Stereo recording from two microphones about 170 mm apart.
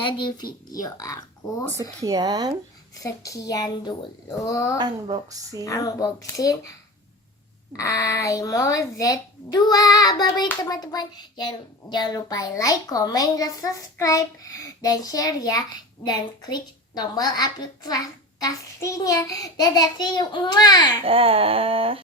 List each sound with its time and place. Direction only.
0.0 s a child's voice: 25° left (ahead or behind)
2.0 s a woman's voice: 20° right (ahead or behind)
3.0 s a child's voice: 20° left (ahead or behind)
4.8 s a woman's voice: 25° right (ahead or behind)
5.6 s a child's voice: 20° left (ahead or behind)
7.8 s a child's voice: 20° left (ahead or behind)
21.0 s speech: 35° right (ahead or behind)